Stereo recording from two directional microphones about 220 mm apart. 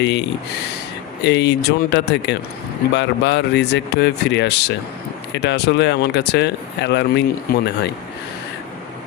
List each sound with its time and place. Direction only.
0.0 s speech: 50° left (ahead or behind)